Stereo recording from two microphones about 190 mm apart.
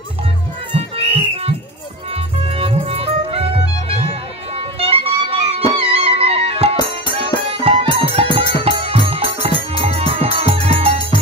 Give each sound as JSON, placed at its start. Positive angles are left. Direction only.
{"t": 0.7, "sound": "music", "side_deg": -30}